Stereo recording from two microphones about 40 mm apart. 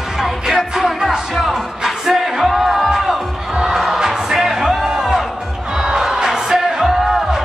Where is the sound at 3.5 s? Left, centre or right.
Centre.